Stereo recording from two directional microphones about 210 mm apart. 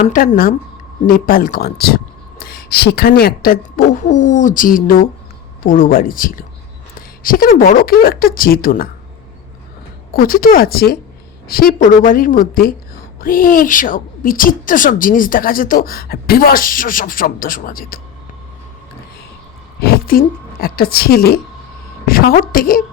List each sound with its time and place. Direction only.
0.0 s a woman's voice: 40° left (ahead or behind)
10.1 s a woman's voice: 45° left (ahead or behind)
19.8 s a woman's voice: 45° left (ahead or behind)